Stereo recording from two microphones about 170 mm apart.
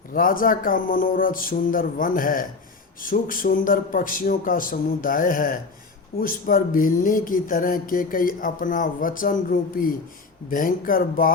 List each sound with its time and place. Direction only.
0.1 s speech: 55° left (ahead or behind)